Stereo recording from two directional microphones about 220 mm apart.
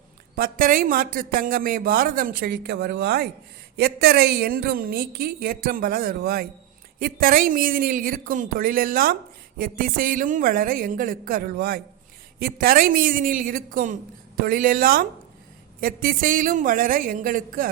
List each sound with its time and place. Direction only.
0.3 s a man's voice: 40° right (ahead or behind)